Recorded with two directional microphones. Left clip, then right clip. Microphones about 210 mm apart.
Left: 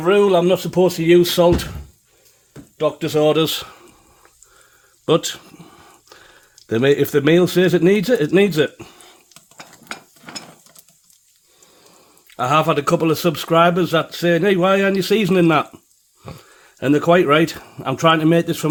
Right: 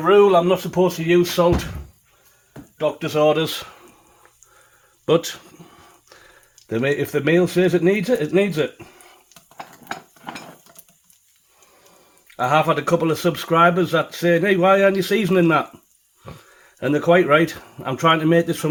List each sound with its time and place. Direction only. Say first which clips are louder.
0.0 s speech: right 1 dB; 60° left (ahead or behind)
3.5 s a sound: left 4 dB; 30° left (ahead or behind)
6.7 s speech: left 5 dB; 45° left (ahead or behind)
12.4 s speech: left 1 dB; 45° left (ahead or behind)